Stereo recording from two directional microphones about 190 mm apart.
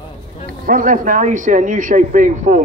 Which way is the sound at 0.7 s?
45° right (ahead or behind).